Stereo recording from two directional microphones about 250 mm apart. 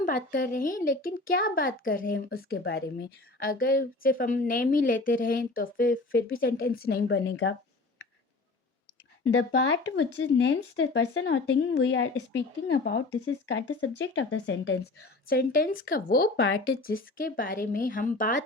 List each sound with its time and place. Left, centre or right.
0.2 s a woman's voice: left
9.3 s a woman's voice: left